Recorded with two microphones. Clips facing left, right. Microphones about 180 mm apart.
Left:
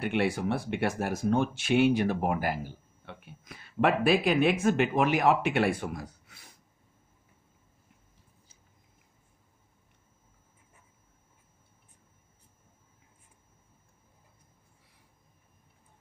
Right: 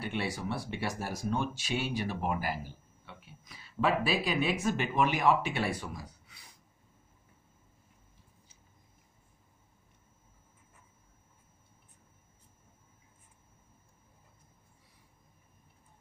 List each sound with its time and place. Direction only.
0.0 s speech: 55° left (ahead or behind)